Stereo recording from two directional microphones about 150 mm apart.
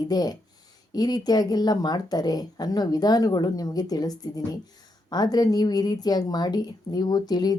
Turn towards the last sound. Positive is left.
turn(degrees=25)  # may be behind; listen again after turning